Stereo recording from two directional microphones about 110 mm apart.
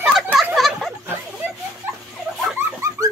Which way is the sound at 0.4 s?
Centre (ahead or behind).